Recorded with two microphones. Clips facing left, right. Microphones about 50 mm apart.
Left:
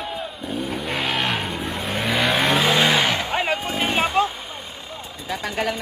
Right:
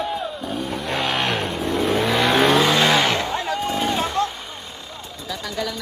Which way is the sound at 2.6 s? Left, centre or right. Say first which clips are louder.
Right 1 dB; centre.